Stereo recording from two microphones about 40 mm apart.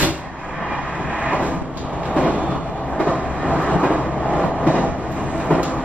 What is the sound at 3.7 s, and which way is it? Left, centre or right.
Train, right.